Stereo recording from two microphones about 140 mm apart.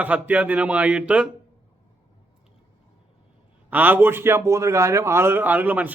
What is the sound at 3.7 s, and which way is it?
A man's voice, 15° right (ahead or behind).